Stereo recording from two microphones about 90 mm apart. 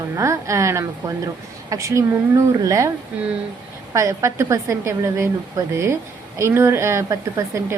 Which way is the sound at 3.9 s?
35° right (ahead or behind).